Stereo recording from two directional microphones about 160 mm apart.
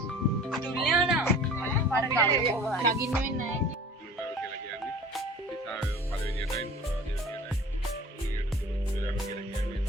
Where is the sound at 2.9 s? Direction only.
20° right (ahead or behind).